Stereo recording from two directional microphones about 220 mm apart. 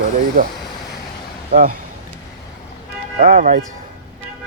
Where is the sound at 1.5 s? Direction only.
40° right (ahead or behind).